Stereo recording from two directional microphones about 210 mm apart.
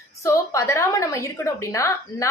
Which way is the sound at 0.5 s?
15° left (ahead or behind).